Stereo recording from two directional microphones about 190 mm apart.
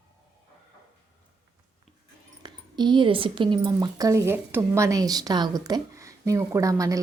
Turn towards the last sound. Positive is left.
turn(degrees=-15)  # may be behind; listen again after turning